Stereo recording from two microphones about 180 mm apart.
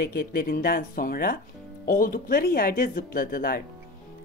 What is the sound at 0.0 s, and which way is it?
Speech, 55° left (ahead or behind).